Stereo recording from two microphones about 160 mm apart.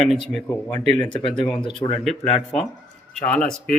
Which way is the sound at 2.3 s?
Centre (ahead or behind).